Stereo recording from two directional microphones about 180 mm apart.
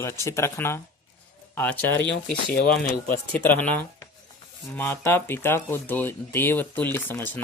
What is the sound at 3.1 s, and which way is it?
Speech, 10° left (ahead or behind).